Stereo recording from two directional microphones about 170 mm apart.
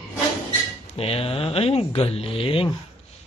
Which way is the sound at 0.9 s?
35° left (ahead or behind).